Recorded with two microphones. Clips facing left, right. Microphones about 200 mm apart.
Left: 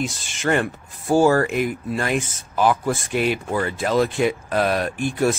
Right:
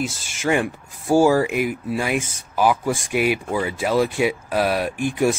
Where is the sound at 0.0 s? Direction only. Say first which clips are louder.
Even; 10° right (ahead or behind).